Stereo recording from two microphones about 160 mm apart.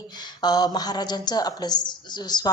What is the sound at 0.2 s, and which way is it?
A woman's voice, 25° left (ahead or behind).